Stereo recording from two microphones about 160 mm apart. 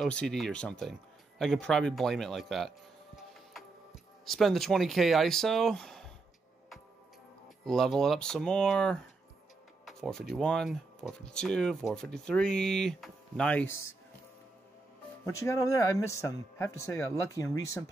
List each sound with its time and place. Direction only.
0.0 s speech: 5° left (ahead or behind)
4.3 s speech: centre (ahead or behind)
7.6 s speech: centre (ahead or behind)
9.8 s a sound: 5° left (ahead or behind)
10.3 s speech: 5° left (ahead or behind)
15.2 s speech: 20° left (ahead or behind)